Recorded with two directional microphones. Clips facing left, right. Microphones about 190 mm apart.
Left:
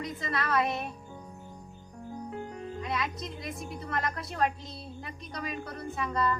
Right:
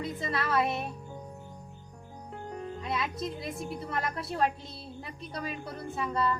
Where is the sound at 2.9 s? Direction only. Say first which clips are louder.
Right 3 dB; 5° right (ahead or behind).